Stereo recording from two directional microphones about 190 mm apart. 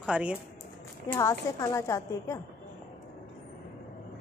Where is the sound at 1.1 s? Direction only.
15° left (ahead or behind).